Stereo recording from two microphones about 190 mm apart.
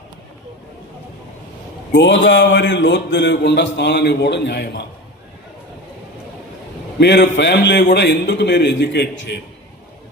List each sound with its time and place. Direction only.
1.9 s a man's voice: 70° left (ahead or behind)
7.0 s a man's voice: 65° left (ahead or behind)